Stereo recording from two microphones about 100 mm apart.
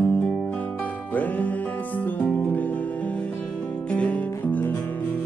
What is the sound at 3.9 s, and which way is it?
Music, 15° left (ahead or behind).